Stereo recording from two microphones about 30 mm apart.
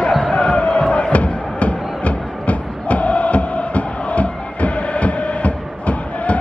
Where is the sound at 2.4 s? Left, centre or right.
Left.